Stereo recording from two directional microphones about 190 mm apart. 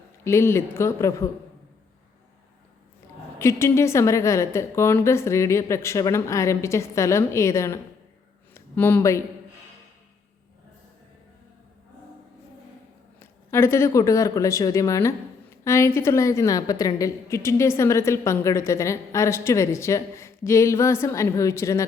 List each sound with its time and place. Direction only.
0.3 s a woman's voice: 15° left (ahead or behind)
3.3 s a woman's voice: 15° left (ahead or behind)
13.1 s a woman's voice: 15° left (ahead or behind)